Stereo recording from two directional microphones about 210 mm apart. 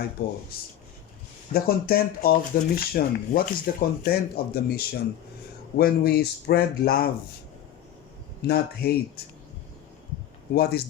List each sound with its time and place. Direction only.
0.2 s speech: 45° left (ahead or behind)
1.5 s speech: 45° left (ahead or behind)
8.4 s speech: 50° left (ahead or behind)
10.5 s speech: 50° left (ahead or behind)